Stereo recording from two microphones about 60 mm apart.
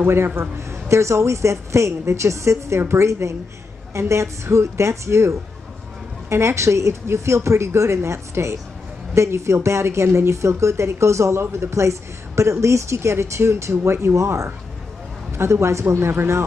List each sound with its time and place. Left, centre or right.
0.0 s a woman's voice: right
0.6 s a woman's voice: right
15.3 s a woman's voice: right